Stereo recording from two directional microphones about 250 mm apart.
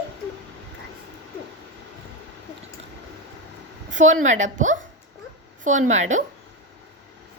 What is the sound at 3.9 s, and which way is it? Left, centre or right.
A woman's voice, right.